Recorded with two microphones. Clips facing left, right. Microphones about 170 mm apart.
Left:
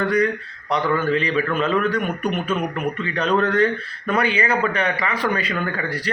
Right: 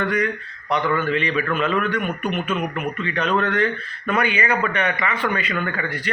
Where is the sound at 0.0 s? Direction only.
35° left (ahead or behind).